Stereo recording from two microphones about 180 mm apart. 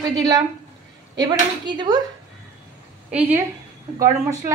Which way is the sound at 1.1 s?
25° right (ahead or behind).